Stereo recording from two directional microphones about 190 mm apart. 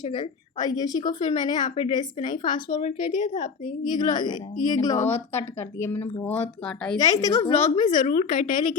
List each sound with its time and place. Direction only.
0.1 s a woman's voice: 20° left (ahead or behind)
2.6 s a woman's voice: 35° left (ahead or behind)
3.9 s a woman's voice: 25° left (ahead or behind); by 7.0 s 5° left (ahead or behind)
7.0 s a woman's voice: 20° left (ahead or behind)
7.5 s a woman's voice: 35° left (ahead or behind)